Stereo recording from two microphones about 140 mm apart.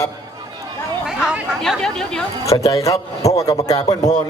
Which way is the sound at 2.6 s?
20° left (ahead or behind).